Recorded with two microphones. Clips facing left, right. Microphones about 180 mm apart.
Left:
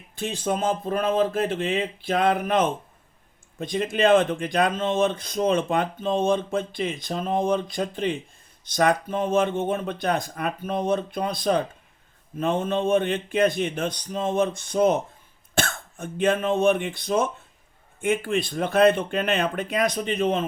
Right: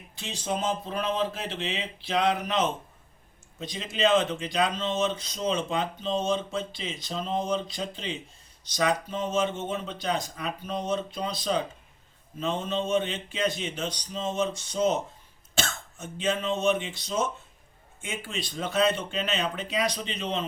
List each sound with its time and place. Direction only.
0.2 s speech: 50° left (ahead or behind)